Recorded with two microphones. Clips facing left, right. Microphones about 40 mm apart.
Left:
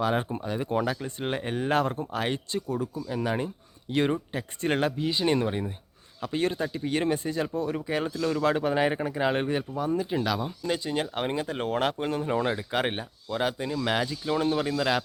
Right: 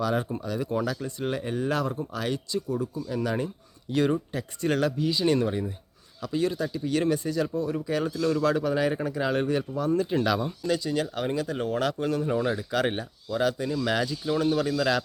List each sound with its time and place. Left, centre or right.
0.0 s speech: left
3.1 s speech: left
6.2 s speech: left; by 8.4 s centre
8.4 s speech: left; by 10.7 s centre
10.7 s speech: left